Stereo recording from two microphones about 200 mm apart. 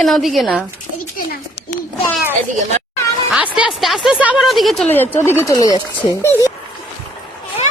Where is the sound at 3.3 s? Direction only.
5° right (ahead or behind); by 6.5 s 15° left (ahead or behind).